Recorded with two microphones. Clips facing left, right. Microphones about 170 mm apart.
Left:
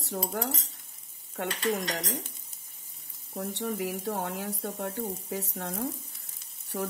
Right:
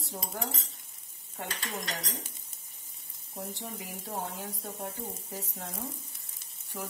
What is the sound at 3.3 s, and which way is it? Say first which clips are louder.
Frying: left 8 dB; 75° left (ahead or behind).